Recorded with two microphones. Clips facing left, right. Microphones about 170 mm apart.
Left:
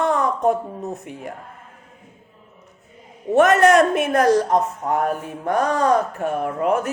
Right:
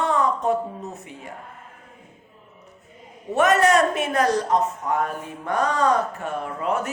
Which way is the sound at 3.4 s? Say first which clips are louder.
Left 4 dB; 55° left (ahead or behind).